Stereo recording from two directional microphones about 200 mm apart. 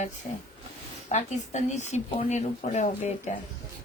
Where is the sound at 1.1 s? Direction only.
35° left (ahead or behind).